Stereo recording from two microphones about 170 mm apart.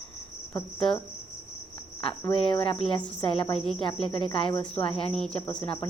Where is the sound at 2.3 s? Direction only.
30° left (ahead or behind).